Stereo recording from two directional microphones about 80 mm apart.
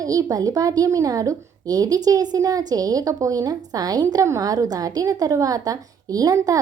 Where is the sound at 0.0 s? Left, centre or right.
Right.